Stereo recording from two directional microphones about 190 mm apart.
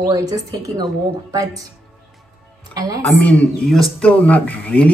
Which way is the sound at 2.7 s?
20° right (ahead or behind).